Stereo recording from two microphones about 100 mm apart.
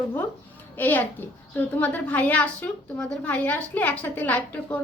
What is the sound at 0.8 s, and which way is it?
A child's voice, 15° left (ahead or behind).